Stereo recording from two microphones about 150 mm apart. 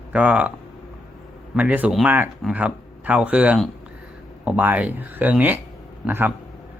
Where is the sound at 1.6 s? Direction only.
10° right (ahead or behind).